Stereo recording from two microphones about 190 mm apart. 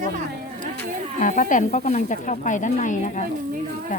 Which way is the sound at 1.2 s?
40° left (ahead or behind).